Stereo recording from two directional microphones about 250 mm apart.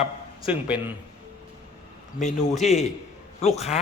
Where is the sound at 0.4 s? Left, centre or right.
Centre.